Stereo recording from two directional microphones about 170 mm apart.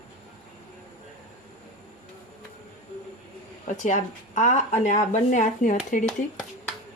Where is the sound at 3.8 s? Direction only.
45° left (ahead or behind).